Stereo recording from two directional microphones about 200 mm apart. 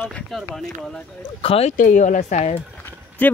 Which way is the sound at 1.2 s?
30° left (ahead or behind).